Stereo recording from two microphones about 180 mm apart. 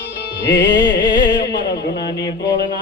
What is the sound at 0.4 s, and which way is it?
Music, 70° left (ahead or behind).